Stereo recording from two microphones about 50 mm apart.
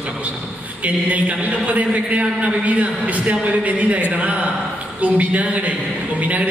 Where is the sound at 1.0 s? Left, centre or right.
Right.